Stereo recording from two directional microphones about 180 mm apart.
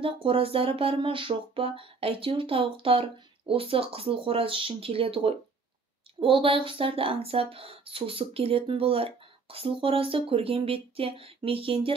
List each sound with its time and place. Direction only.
0.0 s speech: 30° right (ahead or behind)